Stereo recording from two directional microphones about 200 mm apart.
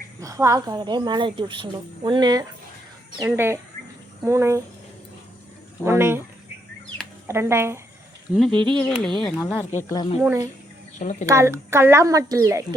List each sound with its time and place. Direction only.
0.2 s speech: 15° right (ahead or behind)
5.8 s speech: 15° right (ahead or behind)
7.3 s speech: 15° right (ahead or behind)
8.3 s speech: centre (ahead or behind)
8.5 s speech: 25° right (ahead or behind)
8.8 s speech: 5° left (ahead or behind)
9.9 s speech: 25° left (ahead or behind)
10.2 s speech: 10° right (ahead or behind)
11.0 s speech: 35° left (ahead or behind)
11.3 s speech: 15° right (ahead or behind)